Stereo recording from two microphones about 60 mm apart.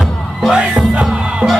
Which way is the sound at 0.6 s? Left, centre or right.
Centre.